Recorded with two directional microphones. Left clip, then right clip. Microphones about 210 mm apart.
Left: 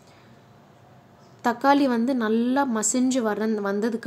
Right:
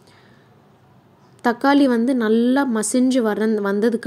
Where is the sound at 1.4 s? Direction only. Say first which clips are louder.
Right 3 dB; 15° right (ahead or behind).